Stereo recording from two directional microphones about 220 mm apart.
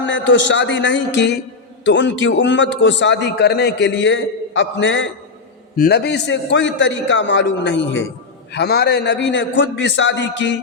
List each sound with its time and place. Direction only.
0.0 s a man's voice: 55° left (ahead or behind)
5.7 s a man's voice: 45° left (ahead or behind)